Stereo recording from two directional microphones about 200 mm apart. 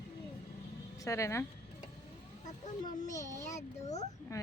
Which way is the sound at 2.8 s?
40° left (ahead or behind).